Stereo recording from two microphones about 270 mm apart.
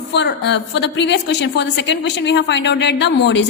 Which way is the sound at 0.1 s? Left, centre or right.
Left.